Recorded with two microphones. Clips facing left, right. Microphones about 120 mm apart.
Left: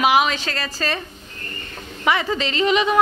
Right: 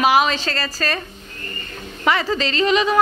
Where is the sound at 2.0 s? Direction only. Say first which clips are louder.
Right 1 dB; 15° left (ahead or behind).